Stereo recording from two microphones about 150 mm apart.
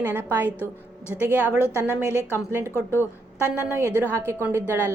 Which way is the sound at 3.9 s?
15° right (ahead or behind).